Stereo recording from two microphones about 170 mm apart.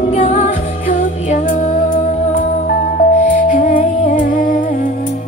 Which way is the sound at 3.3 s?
50° left (ahead or behind).